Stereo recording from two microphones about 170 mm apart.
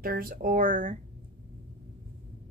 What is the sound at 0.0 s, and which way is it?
Speech, 60° right (ahead or behind).